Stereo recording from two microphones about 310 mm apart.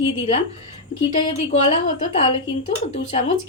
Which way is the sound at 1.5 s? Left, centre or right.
Centre.